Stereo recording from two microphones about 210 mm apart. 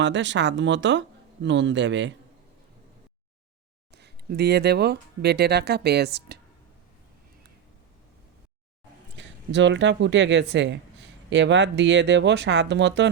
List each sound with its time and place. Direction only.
0.0 s speech: 60° right (ahead or behind)
3.9 s speech: 50° right (ahead or behind)
9.1 s speech: 60° right (ahead or behind)